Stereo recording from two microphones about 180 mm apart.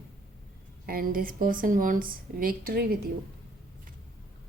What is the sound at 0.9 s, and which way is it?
Speech, 50° right (ahead or behind).